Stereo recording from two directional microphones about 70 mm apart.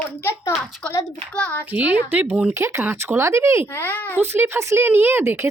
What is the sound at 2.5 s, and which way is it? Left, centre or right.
Speech, right.